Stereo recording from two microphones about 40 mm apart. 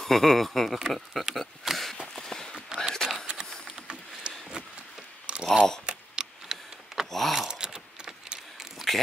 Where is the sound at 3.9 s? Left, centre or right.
Right.